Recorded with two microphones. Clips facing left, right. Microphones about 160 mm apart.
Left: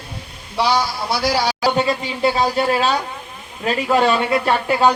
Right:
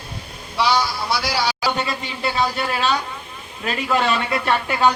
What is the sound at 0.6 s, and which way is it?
A man's voice, 45° left (ahead or behind).